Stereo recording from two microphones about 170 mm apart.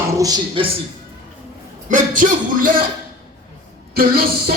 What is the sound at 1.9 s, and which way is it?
Music, 50° right (ahead or behind).